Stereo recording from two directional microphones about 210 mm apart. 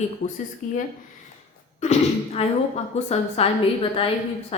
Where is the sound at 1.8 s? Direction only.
30° left (ahead or behind).